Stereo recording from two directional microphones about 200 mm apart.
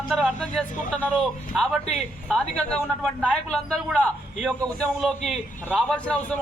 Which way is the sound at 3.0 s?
5° left (ahead or behind).